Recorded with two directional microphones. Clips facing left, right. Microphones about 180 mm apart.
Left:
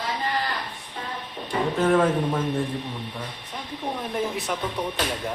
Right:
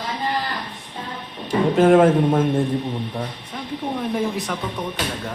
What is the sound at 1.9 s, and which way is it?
Speech, 50° right (ahead or behind).